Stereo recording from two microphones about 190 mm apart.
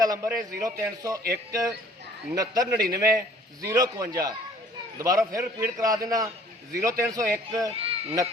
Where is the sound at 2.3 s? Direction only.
20° right (ahead or behind).